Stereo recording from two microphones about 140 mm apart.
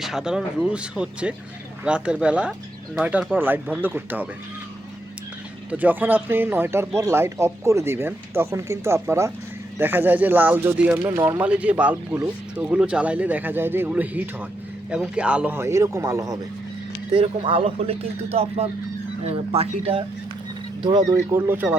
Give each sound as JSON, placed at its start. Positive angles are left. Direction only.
{"t": 0.0, "sound": "speech", "side_deg": -5}
{"t": 5.7, "sound": "speech", "side_deg": -10}
{"t": 11.1, "sound": "a man's voice", "side_deg": -25}
{"t": 11.3, "sound": "a man's voice", "side_deg": -10}
{"t": 17.1, "sound": "speech", "side_deg": -40}
{"t": 21.3, "sound": "speech", "side_deg": -15}